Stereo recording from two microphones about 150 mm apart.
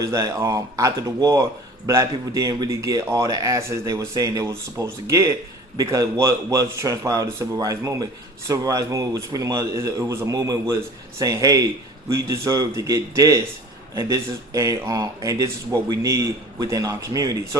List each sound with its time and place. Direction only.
0.0 s speech: 20° right (ahead or behind)